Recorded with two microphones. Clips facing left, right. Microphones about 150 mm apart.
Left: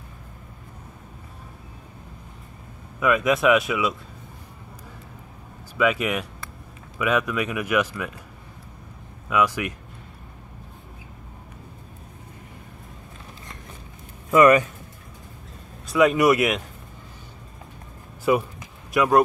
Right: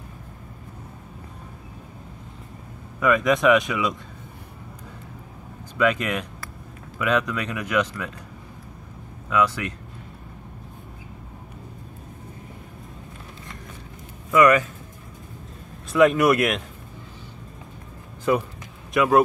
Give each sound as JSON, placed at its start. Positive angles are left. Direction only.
{"t": 3.0, "sound": "speech", "side_deg": 5}
{"t": 5.8, "sound": "speech", "side_deg": 5}
{"t": 9.3, "sound": "speech", "side_deg": 10}
{"t": 14.3, "sound": "speech", "side_deg": 25}
{"t": 15.9, "sound": "speech", "side_deg": 0}
{"t": 18.3, "sound": "speech", "side_deg": 10}
{"t": 18.9, "sound": "speech", "side_deg": 0}